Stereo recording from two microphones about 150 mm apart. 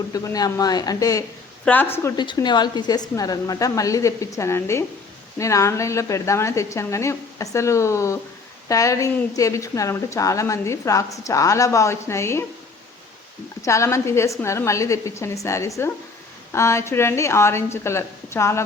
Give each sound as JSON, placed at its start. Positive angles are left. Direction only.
{"t": 0.1, "sound": "a woman's voice", "side_deg": 25}
{"t": 1.6, "sound": "a woman's voice", "side_deg": 10}
{"t": 2.1, "sound": "a woman's voice", "side_deg": 30}
{"t": 13.6, "sound": "a woman's voice", "side_deg": 20}